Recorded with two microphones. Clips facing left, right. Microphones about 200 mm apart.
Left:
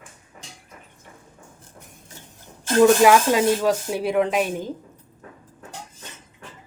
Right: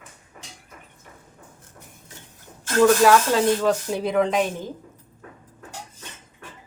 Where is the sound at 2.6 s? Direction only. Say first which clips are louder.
Left 2 dB; 20° left (ahead or behind); by 4.4 s 5° left (ahead or behind).